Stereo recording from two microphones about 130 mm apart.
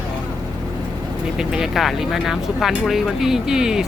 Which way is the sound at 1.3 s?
5° right (ahead or behind).